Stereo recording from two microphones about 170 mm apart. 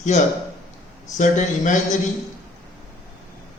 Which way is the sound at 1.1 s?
45° left (ahead or behind).